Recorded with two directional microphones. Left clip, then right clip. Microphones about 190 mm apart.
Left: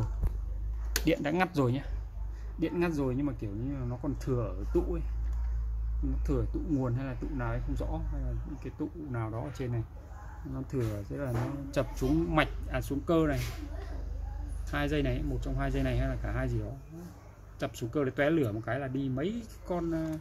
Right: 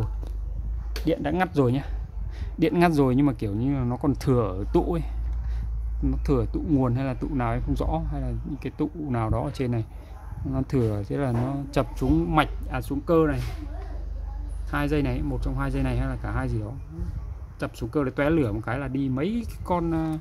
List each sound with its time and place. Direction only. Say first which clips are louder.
1.0 s speech: right 4 dB; 5° right (ahead or behind)
2.6 s speech: right 10 dB; 40° right (ahead or behind)
6.2 s speech: right 8 dB; 35° right (ahead or behind); by 13.4 s 15° right (ahead or behind)
14.7 s speech: right 5 dB; 25° right (ahead or behind)
17.6 s speech: right 5 dB; 20° right (ahead or behind); by 20.1 s 35° right (ahead or behind)